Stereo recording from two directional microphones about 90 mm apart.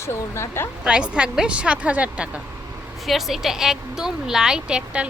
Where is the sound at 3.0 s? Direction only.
Centre (ahead or behind).